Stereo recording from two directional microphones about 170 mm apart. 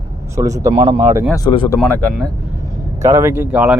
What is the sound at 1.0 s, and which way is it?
Speech, 15° right (ahead or behind).